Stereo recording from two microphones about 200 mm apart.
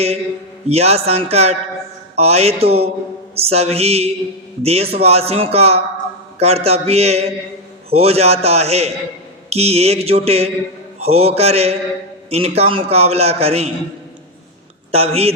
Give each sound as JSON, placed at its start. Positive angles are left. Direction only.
{"t": 0.7, "sound": "a man's voice", "side_deg": -30}
{"t": 14.9, "sound": "a man's voice", "side_deg": -30}